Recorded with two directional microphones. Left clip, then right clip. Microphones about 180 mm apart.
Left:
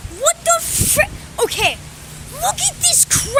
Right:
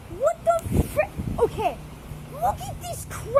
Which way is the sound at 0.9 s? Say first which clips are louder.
Left 8 dB; 25° left (ahead or behind).